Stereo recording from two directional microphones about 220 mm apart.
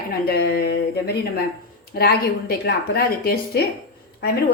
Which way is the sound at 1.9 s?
45° left (ahead or behind).